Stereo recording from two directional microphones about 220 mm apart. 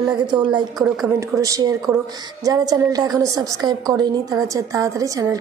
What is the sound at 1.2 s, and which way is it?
A woman's voice, 15° right (ahead or behind).